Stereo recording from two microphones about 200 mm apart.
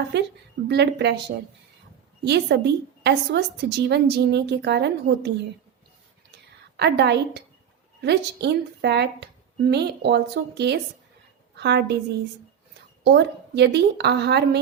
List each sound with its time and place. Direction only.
0.1 s a woman's voice: 60° right (ahead or behind)
2.2 s a woman's voice: 60° right (ahead or behind)
6.7 s a woman's voice: 55° right (ahead or behind)
13.1 s a woman's voice: 60° right (ahead or behind)